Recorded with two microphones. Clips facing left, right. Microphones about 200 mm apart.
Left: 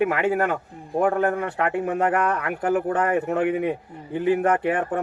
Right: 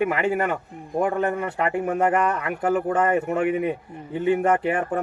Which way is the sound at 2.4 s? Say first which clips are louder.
Even; 5° left (ahead or behind).